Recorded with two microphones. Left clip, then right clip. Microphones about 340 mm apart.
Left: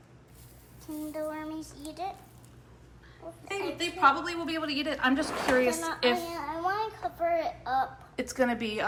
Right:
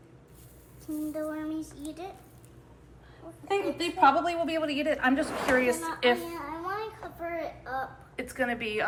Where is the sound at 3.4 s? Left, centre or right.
Centre.